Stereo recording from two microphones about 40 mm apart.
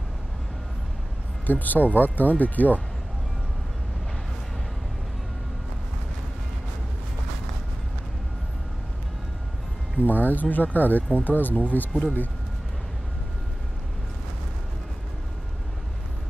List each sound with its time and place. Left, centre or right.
1.4 s speech: left
9.9 s speech: left